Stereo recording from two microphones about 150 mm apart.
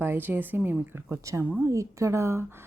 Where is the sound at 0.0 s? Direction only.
15° right (ahead or behind).